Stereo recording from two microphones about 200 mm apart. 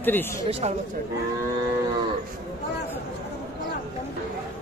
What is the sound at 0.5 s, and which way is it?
Speech, 30° right (ahead or behind).